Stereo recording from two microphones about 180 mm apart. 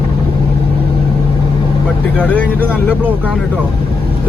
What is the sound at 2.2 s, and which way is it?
Speech, 5° left (ahead or behind).